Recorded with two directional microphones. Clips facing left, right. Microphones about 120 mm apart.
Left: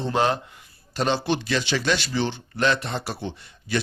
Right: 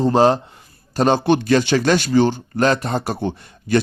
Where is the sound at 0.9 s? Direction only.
45° right (ahead or behind).